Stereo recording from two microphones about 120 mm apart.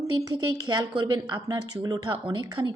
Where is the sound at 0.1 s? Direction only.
30° right (ahead or behind).